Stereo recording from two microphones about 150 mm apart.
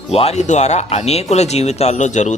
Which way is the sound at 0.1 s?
45° left (ahead or behind).